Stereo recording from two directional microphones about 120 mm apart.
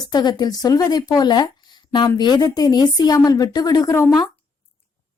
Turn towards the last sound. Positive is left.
turn(degrees=20)  # may be behind; listen again after turning